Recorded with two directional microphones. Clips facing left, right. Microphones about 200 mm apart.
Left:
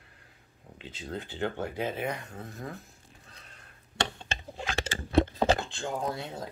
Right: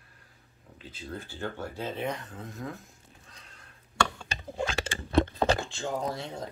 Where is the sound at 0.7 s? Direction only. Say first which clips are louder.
Left 2 dB; 20° left (ahead or behind).